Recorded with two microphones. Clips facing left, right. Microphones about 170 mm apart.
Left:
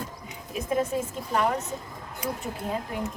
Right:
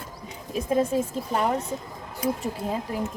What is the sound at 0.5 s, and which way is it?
Speech, 30° right (ahead or behind).